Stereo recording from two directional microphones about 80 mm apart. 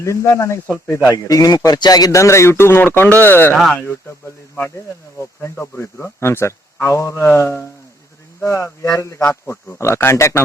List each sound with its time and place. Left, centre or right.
0.0 s a man's voice: left
1.1 s a man's voice: left
5.4 s a man's voice: left